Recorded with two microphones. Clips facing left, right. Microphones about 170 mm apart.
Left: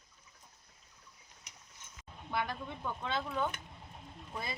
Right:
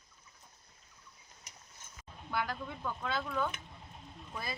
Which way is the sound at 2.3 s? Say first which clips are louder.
Even; 25° left (ahead or behind).